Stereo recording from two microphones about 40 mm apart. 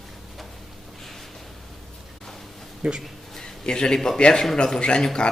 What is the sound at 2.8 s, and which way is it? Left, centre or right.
Speech, right.